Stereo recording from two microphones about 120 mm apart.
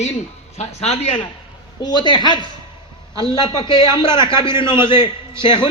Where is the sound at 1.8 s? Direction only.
35° left (ahead or behind).